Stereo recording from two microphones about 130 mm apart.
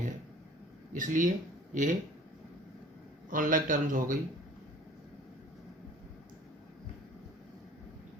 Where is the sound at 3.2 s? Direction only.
90° right.